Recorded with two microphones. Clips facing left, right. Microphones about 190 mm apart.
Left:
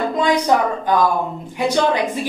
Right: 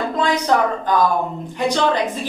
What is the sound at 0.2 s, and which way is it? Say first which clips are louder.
Speech: left 1 dB; 15° left (ahead or behind).